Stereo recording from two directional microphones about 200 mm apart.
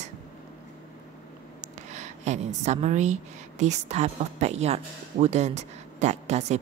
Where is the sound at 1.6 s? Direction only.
35° right (ahead or behind).